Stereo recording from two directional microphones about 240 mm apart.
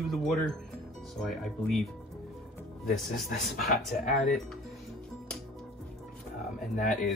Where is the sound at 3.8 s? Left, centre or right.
Centre.